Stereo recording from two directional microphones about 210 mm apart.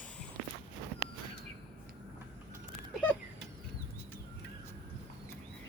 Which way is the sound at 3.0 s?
5° left (ahead or behind).